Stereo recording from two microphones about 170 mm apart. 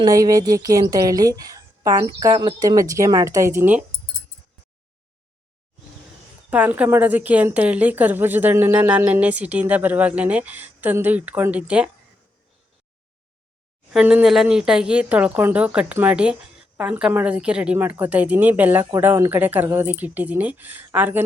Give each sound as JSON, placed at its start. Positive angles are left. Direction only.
{"t": 0.0, "sound": "a woman's voice", "side_deg": -20}
{"t": 6.5, "sound": "a woman's voice", "side_deg": -10}
{"t": 13.9, "sound": "a woman's voice", "side_deg": -5}